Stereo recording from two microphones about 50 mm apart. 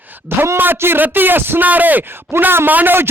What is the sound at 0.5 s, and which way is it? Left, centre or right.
A man's voice, right.